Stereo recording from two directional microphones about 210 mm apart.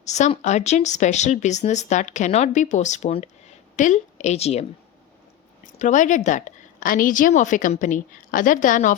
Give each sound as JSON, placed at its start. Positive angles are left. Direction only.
{"t": 0.0, "sound": "speech", "side_deg": 35}
{"t": 5.8, "sound": "speech", "side_deg": 35}